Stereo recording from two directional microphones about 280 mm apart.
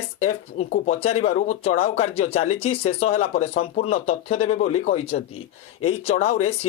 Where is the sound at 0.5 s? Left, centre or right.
Left.